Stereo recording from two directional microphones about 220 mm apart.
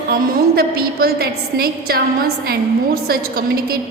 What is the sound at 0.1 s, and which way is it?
A woman's voice, 45° right (ahead or behind).